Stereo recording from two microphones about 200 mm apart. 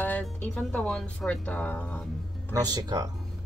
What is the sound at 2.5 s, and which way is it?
Speech, 20° right (ahead or behind).